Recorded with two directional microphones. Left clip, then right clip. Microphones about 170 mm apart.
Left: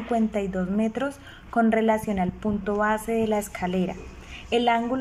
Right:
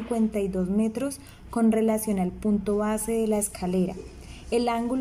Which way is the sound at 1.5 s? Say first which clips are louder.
Left 3 dB; 35° right (ahead or behind).